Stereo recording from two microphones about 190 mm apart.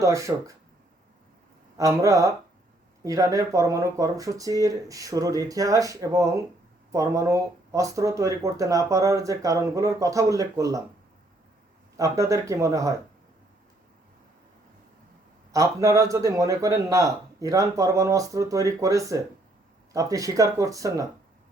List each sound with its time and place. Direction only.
0.0 s speech: 15° right (ahead or behind)
1.8 s speech: 15° right (ahead or behind)
11.9 s speech: 15° right (ahead or behind)
15.5 s speech: 15° right (ahead or behind)